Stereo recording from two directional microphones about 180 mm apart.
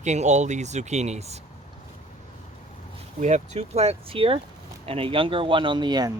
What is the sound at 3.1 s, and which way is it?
Speech, 40° right (ahead or behind).